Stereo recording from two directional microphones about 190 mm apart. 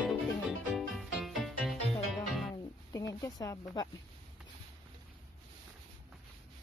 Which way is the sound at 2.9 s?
20° left (ahead or behind).